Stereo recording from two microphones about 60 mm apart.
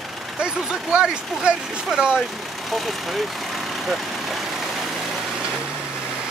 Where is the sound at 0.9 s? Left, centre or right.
Centre.